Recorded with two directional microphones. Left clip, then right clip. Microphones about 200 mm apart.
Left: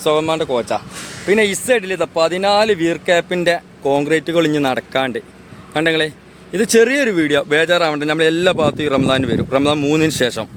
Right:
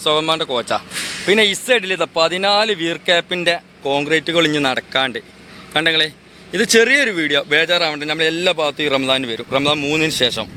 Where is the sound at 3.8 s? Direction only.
25° left (ahead or behind); by 10.4 s 45° left (ahead or behind).